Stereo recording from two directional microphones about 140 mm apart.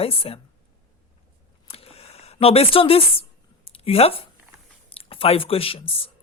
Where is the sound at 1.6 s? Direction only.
45° left (ahead or behind).